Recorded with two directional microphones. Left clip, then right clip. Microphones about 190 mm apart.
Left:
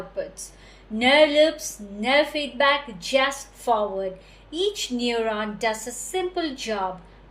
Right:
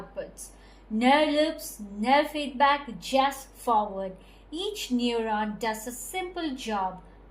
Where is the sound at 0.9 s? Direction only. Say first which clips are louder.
Left 6 dB; 15° right (ahead or behind).